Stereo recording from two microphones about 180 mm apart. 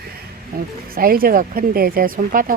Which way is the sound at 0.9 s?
55° right (ahead or behind).